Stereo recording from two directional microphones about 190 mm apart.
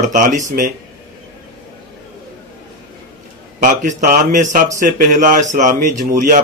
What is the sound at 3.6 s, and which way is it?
A man's voice, 40° right (ahead or behind).